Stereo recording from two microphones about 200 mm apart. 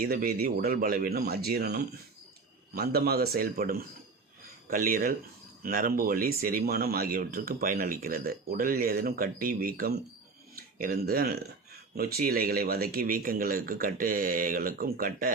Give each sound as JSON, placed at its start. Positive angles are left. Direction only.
{"t": 0.0, "sound": "speech", "side_deg": -45}